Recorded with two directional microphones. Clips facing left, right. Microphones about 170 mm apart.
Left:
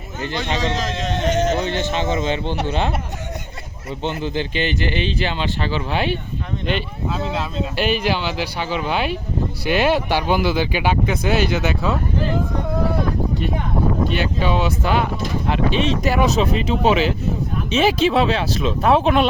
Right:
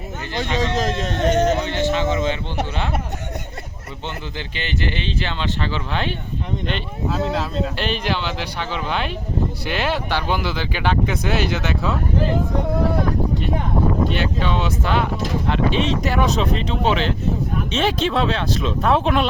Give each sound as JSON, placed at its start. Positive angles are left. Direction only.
{"t": 0.6, "sound": "speech", "side_deg": -50}
{"t": 1.7, "sound": "a man's voice", "side_deg": 20}
{"t": 4.0, "sound": "speech", "side_deg": 15}
{"t": 14.1, "sound": "speech", "side_deg": 10}